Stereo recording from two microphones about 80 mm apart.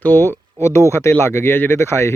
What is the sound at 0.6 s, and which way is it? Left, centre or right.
Speech, left.